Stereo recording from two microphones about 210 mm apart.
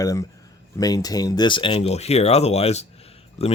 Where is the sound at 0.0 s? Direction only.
15° left (ahead or behind).